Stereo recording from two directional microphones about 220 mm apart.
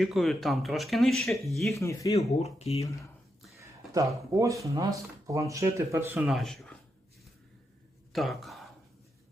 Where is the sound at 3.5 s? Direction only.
15° right (ahead or behind); by 6.7 s centre (ahead or behind).